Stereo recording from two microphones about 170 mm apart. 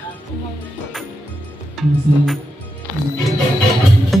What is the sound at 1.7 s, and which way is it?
Speech, centre (ahead or behind).